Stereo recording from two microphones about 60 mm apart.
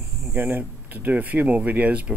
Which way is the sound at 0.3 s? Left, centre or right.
Right.